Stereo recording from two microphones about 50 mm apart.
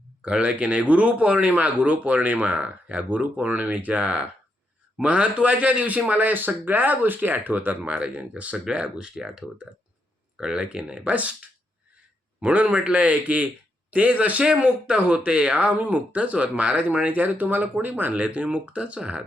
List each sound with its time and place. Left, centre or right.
0.2 s speech: right
11.0 s speech: right
12.4 s speech: right